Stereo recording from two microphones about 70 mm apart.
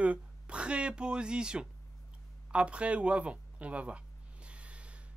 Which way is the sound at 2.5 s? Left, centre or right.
Centre.